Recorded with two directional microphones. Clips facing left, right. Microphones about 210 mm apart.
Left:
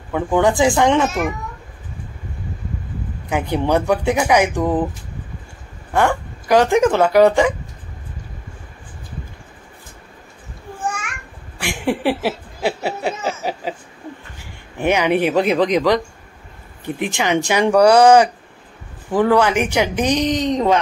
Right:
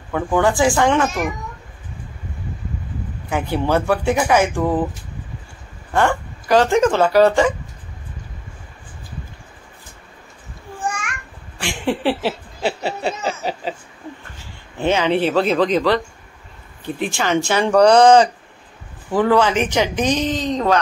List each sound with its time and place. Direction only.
0.1 s speech: 15° left (ahead or behind)
3.5 s speech: 15° left (ahead or behind)
5.9 s speech: 15° left (ahead or behind)
11.5 s a sound: 10° left (ahead or behind)
14.4 s speech: 15° left (ahead or behind)